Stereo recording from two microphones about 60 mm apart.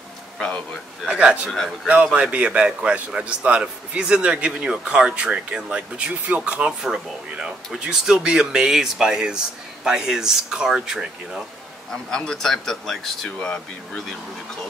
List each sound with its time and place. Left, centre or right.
1.0 s a man's voice: centre
11.9 s a man's voice: centre